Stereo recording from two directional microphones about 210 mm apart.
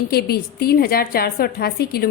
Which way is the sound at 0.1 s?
45° left (ahead or behind).